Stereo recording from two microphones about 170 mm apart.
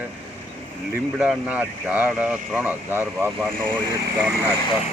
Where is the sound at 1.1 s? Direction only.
5° right (ahead or behind).